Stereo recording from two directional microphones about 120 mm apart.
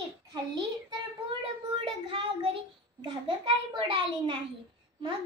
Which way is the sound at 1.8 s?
45° right (ahead or behind).